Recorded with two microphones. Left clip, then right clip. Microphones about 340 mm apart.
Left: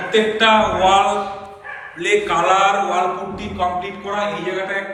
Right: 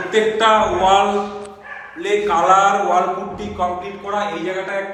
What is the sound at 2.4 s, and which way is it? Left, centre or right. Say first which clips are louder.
Speech: right 3 dB; centre.